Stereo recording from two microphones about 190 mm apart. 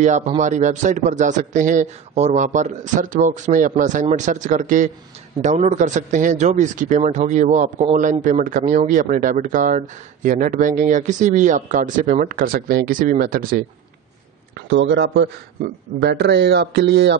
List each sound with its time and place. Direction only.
0.0 s a man's voice: 40° right (ahead or behind)
14.5 s a man's voice: 70° right (ahead or behind)